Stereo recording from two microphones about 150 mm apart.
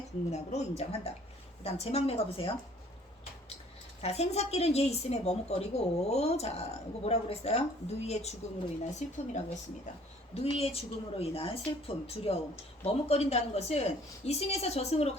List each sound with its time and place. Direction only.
0.3 s a woman's voice: 50° left (ahead or behind)
4.0 s a woman's voice: 45° left (ahead or behind)